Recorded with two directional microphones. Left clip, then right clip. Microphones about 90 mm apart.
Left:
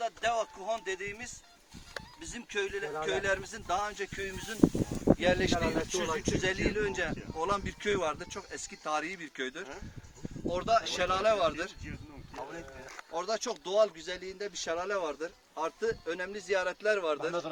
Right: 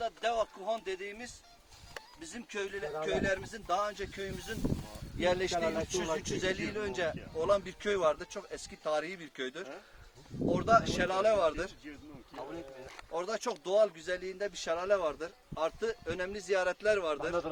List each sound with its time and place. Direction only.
0.0 s a sound: 5° right (ahead or behind)
2.3 s speech: 15° right (ahead or behind)
13.1 s speech: 15° right (ahead or behind); by 17.4 s centre (ahead or behind)